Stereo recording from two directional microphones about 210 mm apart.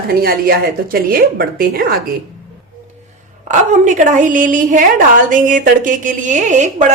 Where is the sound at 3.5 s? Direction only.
35° right (ahead or behind).